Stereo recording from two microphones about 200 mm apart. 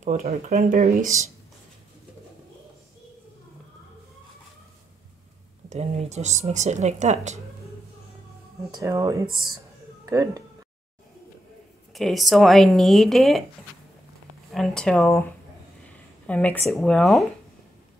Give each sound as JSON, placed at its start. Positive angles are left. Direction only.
{"t": 0.0, "sound": "speech", "side_deg": -35}
{"t": 5.7, "sound": "speech", "side_deg": -35}
{"t": 8.7, "sound": "speech", "side_deg": -15}
{"t": 11.9, "sound": "speech", "side_deg": 0}
{"t": 14.5, "sound": "speech", "side_deg": 0}
{"t": 16.3, "sound": "speech", "side_deg": 5}